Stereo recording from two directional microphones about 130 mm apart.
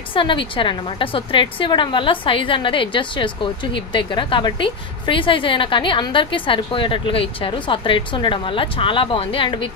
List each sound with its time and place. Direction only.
0.1 s a woman's voice: 40° left (ahead or behind)